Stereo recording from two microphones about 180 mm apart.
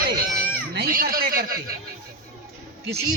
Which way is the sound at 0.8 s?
60° right (ahead or behind).